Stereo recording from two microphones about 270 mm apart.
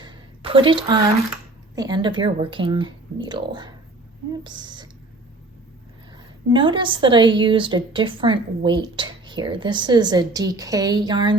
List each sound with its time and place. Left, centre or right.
0.0 s a sound: centre
1.7 s a woman's voice: centre
6.5 s a woman's voice: centre